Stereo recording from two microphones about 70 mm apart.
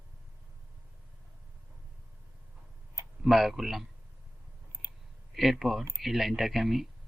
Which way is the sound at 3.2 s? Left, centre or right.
Centre.